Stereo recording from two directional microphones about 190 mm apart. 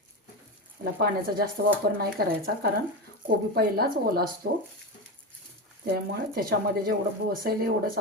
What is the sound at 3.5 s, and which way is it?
Speech, 55° right (ahead or behind).